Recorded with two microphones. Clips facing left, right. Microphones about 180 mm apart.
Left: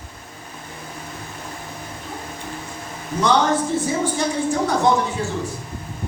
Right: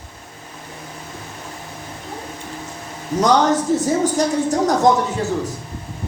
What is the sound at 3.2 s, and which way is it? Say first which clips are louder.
A woman's voice: right 3 dB; 40° right (ahead or behind).